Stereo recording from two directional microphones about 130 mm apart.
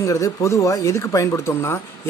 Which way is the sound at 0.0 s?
25° left (ahead or behind).